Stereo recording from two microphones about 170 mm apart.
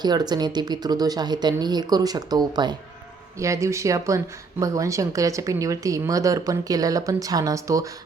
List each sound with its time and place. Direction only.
0.0 s speech: 25° right (ahead or behind)